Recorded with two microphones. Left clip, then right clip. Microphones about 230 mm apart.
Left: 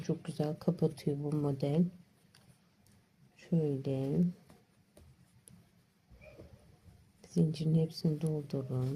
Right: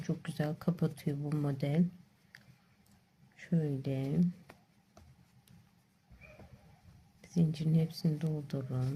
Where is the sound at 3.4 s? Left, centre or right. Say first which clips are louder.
Left 3 dB; right.